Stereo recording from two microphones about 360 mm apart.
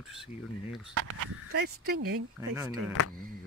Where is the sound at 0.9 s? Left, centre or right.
Right.